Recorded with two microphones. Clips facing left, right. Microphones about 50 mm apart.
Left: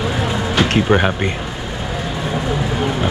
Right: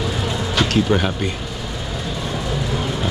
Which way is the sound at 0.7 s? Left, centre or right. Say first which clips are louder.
Left 3 dB; left.